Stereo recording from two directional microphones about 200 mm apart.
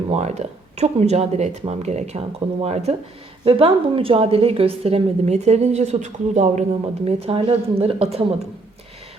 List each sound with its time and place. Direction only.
0.1 s a woman's voice: 35° right (ahead or behind)